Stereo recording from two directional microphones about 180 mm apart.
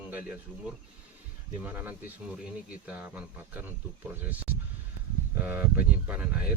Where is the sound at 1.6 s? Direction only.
10° right (ahead or behind).